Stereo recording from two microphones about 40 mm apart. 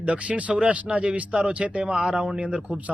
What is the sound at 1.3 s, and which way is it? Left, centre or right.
Speech, right.